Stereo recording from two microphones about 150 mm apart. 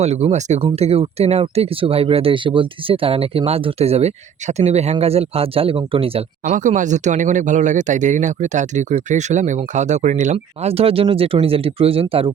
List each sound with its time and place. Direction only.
0.0 s speech: 45° right (ahead or behind)
0.6 s speech: 40° right (ahead or behind); by 10.3 s 55° right (ahead or behind)
10.3 s speech: 40° right (ahead or behind)